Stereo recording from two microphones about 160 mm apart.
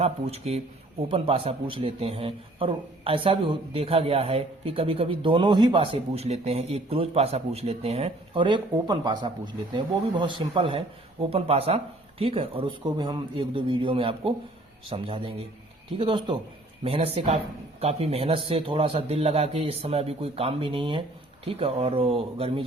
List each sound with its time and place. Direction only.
0.0 s a man's voice: 40° right (ahead or behind)